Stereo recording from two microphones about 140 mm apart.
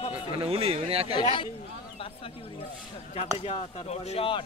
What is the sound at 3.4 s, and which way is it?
Speech, 45° left (ahead or behind).